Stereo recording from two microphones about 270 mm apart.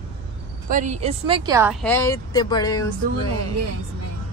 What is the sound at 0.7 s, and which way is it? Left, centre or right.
Speech, right.